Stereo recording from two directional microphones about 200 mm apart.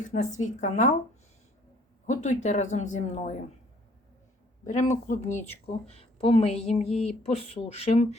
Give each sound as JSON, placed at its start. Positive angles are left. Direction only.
{"t": 0.3, "sound": "speech", "side_deg": 35}
{"t": 2.0, "sound": "speech", "side_deg": 35}
{"t": 4.6, "sound": "speech", "side_deg": 35}